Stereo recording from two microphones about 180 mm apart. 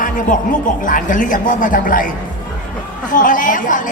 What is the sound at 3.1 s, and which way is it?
Speech, 50° left (ahead or behind).